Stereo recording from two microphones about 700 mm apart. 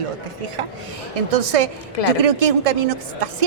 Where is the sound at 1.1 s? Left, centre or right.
Right.